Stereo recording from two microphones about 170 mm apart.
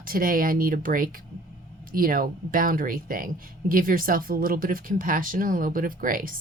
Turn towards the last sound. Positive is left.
turn(degrees=-55)  # may be behind; listen again after turning